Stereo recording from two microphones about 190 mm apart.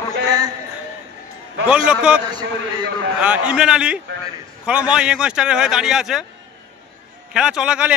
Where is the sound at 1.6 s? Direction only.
5° right (ahead or behind).